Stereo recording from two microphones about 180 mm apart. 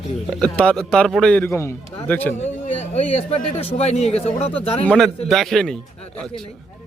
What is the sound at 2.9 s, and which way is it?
Speech, 35° left (ahead or behind).